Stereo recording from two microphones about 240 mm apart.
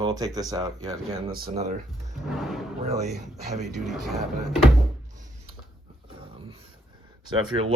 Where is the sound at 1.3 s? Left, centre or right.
Right.